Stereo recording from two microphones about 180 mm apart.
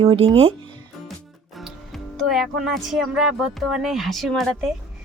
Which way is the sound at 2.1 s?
Centre (ahead or behind).